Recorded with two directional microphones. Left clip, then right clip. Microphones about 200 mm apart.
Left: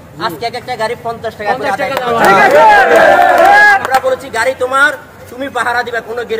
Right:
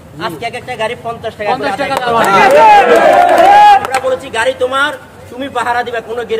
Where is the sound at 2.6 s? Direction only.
20° left (ahead or behind).